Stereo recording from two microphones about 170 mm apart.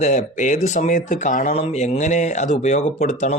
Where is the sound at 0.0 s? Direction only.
45° left (ahead or behind).